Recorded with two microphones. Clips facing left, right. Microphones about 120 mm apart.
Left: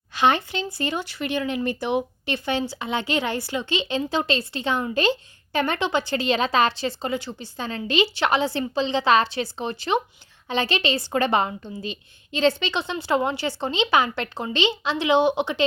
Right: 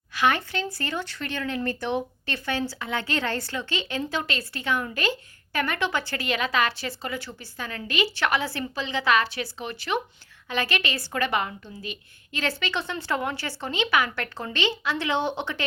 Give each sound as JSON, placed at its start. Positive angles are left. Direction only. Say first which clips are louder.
{"t": 0.1, "sound": "speech", "louder": "left 3 dB", "side_deg": 25}